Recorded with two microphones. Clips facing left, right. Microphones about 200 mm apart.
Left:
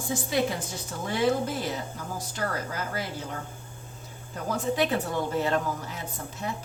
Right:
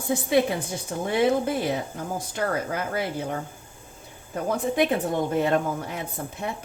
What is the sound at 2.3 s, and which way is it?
A woman's voice, 55° right (ahead or behind).